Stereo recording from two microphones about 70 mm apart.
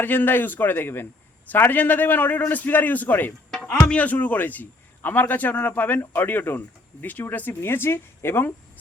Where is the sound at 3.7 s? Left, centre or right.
Centre.